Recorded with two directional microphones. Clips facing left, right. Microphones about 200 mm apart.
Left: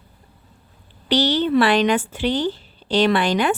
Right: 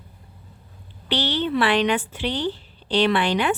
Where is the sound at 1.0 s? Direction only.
40° left (ahead or behind).